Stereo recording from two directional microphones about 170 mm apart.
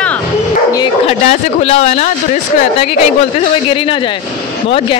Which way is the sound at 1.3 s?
40° left (ahead or behind).